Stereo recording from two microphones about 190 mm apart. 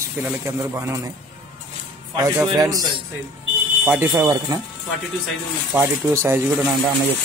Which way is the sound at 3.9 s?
10° right (ahead or behind).